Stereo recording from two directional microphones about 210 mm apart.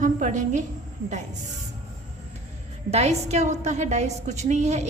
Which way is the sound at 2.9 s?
30° right (ahead or behind).